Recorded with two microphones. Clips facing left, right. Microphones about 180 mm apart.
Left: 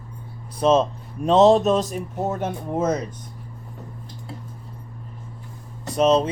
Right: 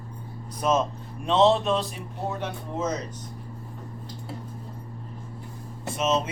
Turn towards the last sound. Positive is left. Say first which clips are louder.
# left 7 dB
turn(degrees=35)  # may be behind; listen again after turning